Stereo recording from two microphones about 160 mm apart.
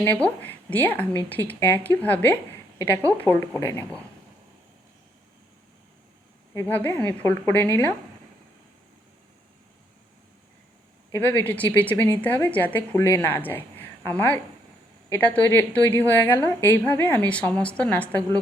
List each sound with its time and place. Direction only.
0.0 s a woman's voice: 10° left (ahead or behind)
6.5 s a woman's voice: 15° left (ahead or behind)
11.1 s a woman's voice: 10° left (ahead or behind)